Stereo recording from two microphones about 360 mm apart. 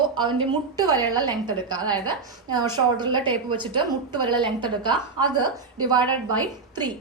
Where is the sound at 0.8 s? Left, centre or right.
Centre.